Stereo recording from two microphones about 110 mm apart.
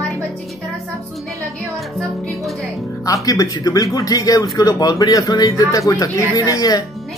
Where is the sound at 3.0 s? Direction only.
30° left (ahead or behind).